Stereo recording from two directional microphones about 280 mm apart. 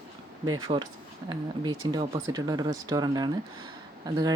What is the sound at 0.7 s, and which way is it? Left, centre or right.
Speech, right.